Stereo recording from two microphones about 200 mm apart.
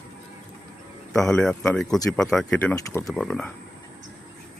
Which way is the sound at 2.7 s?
15° left (ahead or behind).